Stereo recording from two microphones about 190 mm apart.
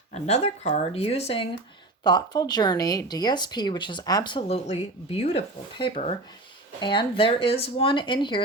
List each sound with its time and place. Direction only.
0.1 s speech: 35° left (ahead or behind)
2.0 s speech: 20° left (ahead or behind)